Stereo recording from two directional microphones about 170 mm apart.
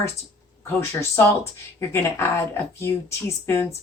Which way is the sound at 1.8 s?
15° left (ahead or behind).